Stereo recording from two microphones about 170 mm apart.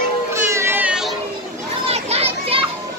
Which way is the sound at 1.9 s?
35° right (ahead or behind).